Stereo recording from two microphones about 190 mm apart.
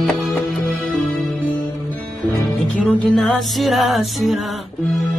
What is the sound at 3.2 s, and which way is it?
Music, centre (ahead or behind).